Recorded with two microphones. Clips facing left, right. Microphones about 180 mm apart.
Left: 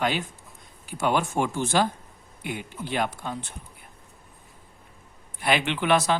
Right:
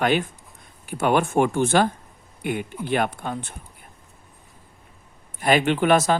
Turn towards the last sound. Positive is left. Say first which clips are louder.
# right 4 dB
turn(degrees=-45)  # may be behind; listen again after turning